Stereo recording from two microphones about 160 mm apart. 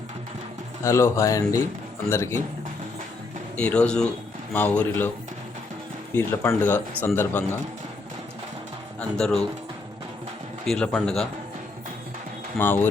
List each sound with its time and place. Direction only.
0.8 s speech: 20° left (ahead or behind)
3.6 s a man's voice: 5° left (ahead or behind)
6.1 s speech: 15° left (ahead or behind)
9.0 s a man's voice: 5° left (ahead or behind)
10.7 s a man's voice: 5° left (ahead or behind)
12.5 s speech: 15° left (ahead or behind)